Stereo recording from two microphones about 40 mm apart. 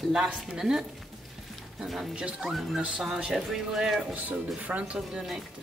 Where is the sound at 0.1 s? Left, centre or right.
Centre.